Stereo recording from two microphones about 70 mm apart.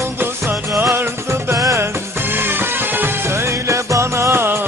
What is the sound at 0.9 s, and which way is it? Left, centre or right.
Music, right.